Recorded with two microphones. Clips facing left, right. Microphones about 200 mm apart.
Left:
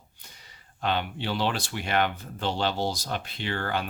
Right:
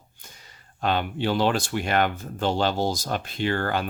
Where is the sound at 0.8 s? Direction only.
45° right (ahead or behind).